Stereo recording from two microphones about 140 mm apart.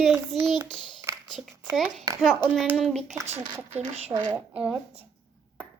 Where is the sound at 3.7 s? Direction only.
50° right (ahead or behind).